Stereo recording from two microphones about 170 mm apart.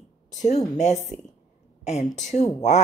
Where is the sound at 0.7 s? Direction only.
45° left (ahead or behind).